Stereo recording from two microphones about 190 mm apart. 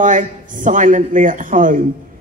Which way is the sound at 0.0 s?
45° right (ahead or behind).